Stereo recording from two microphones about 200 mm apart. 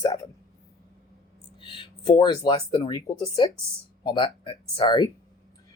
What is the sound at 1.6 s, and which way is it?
Speech, 25° left (ahead or behind).